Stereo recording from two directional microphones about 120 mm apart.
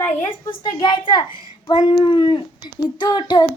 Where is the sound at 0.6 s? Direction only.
40° left (ahead or behind).